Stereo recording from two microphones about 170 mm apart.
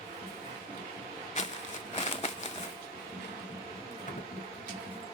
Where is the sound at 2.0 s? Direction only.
40° left (ahead or behind).